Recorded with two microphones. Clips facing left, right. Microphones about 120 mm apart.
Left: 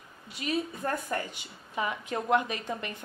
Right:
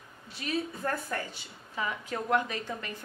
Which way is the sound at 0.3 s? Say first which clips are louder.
Left 2 dB; 15° left (ahead or behind).